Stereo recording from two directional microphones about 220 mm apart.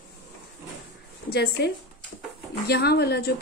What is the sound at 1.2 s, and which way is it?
A woman's voice, 45° left (ahead or behind).